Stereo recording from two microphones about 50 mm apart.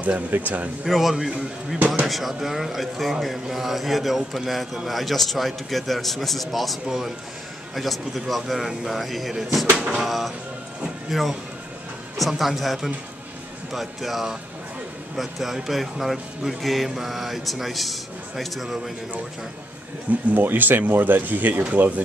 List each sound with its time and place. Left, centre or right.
0.3 s speech: right
0.8 s speech: centre
9.8 s speech: centre
10.0 s speech: centre
20.1 s speech: right
20.4 s speech: right